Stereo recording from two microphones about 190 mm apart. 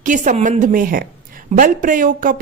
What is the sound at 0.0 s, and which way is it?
A woman's voice, 45° right (ahead or behind).